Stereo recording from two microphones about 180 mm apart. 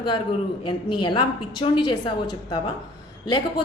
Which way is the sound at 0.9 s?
25° left (ahead or behind).